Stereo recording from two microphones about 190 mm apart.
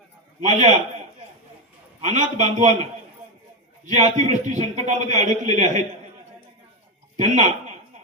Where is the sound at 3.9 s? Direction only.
40° right (ahead or behind).